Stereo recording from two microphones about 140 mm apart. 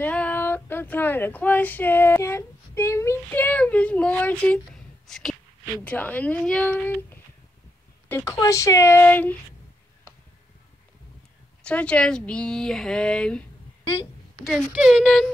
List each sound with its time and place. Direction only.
0.0 s female singing: 10° left (ahead or behind)
5.0 s a sound: 5° left (ahead or behind)
5.9 s speech: 10° left (ahead or behind)
11.6 s speech: 10° left (ahead or behind)
14.4 s speech: centre (ahead or behind)